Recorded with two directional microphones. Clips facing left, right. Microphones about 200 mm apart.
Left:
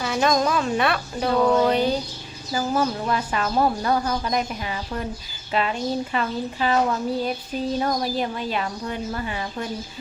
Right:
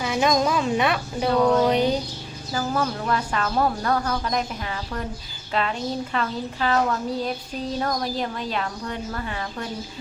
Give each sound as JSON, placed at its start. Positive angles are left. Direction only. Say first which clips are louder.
{"t": 0.0, "sound": "a woman's voice", "louder": "even", "side_deg": -15}
{"t": 1.3, "sound": "speech", "louder": "even", "side_deg": 5}
{"t": 1.7, "sound": "a woman's voice", "louder": "even", "side_deg": -20}
{"t": 2.5, "sound": "speech", "louder": "left 2 dB", "side_deg": 10}